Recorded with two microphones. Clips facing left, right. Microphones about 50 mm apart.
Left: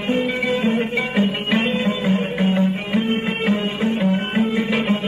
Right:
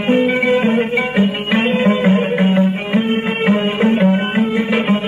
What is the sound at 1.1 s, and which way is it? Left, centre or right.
Music, centre.